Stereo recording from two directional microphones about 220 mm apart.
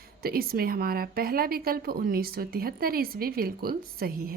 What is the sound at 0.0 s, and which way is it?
Speech, 45° right (ahead or behind).